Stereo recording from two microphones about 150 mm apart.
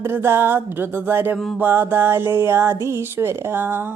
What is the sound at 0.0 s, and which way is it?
Speech, 15° right (ahead or behind).